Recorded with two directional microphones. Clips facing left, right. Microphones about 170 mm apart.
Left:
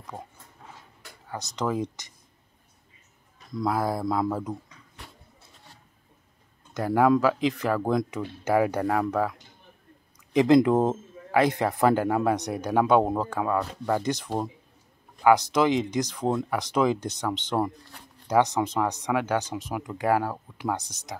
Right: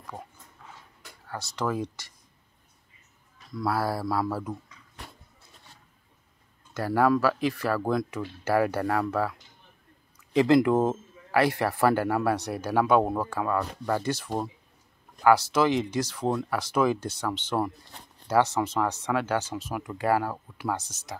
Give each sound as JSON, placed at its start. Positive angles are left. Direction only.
{"t": 1.2, "sound": "a man's voice", "side_deg": 15}
{"t": 3.5, "sound": "speech", "side_deg": 20}
{"t": 6.7, "sound": "a man's voice", "side_deg": 15}